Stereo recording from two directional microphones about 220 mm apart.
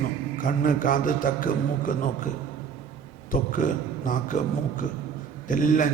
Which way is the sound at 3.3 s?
35° left (ahead or behind).